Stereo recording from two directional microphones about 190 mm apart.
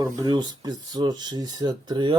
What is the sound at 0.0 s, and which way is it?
Speech, 20° right (ahead or behind).